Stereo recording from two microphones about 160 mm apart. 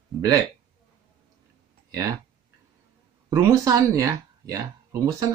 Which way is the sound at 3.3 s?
20° right (ahead or behind).